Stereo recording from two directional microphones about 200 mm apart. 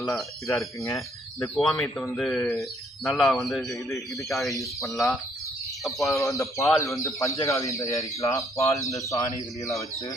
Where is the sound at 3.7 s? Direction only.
15° left (ahead or behind).